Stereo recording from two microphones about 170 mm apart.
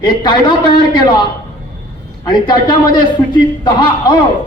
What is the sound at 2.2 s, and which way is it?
Speech, 25° left (ahead or behind).